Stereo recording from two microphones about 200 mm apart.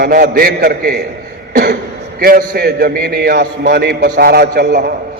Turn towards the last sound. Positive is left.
turn(degrees=-55)  # may be behind; listen again after turning